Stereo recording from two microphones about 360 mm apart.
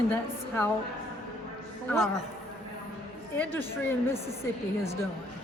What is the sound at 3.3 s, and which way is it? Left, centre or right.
Speech, centre.